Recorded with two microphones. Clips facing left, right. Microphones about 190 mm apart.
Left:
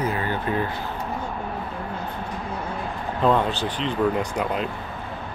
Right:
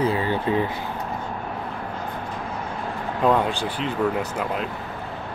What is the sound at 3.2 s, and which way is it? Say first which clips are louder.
Speech: even; 10° right (ahead or behind).